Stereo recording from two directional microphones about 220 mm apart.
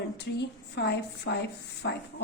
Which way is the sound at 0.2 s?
50° left (ahead or behind).